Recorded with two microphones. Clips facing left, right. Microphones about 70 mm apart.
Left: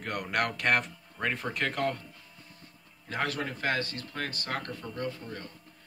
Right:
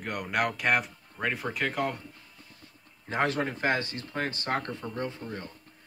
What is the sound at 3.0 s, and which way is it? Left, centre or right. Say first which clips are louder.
Speech: right 4 dB; right.